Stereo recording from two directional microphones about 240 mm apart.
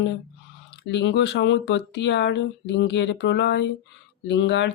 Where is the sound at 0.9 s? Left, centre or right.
Left.